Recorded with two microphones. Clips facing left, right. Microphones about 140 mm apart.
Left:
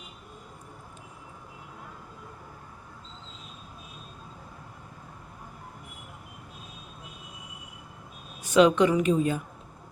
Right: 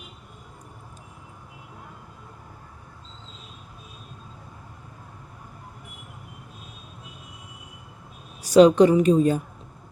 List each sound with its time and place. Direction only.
8.4 s speech: 35° right (ahead or behind)